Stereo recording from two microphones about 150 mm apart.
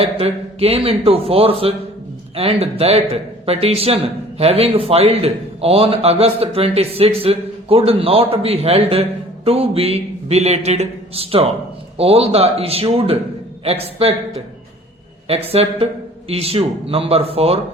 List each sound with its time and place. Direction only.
0.0 s speech: 40° right (ahead or behind)